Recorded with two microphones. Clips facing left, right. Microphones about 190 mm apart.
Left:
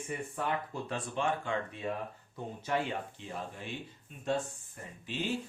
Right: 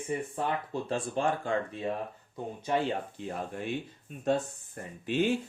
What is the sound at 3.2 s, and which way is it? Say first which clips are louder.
Speech: right 7 dB; 45° right (ahead or behind).